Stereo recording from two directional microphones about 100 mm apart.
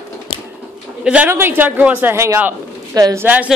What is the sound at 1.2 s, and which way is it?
A man's voice, 20° right (ahead or behind).